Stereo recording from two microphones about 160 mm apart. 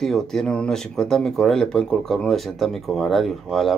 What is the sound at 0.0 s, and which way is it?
Speech, 5° left (ahead or behind).